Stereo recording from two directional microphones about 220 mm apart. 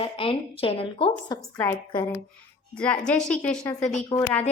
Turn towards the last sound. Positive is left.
turn(degrees=20)  # may be behind; listen again after turning